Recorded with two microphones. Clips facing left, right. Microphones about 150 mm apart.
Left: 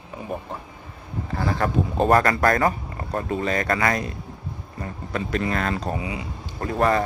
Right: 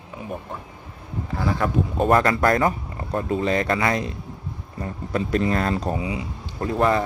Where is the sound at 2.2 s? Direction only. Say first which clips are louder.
Right 1 dB; 20° right (ahead or behind).